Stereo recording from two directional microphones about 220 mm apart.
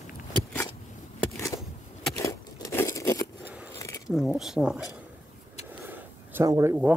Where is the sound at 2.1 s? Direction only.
15° left (ahead or behind).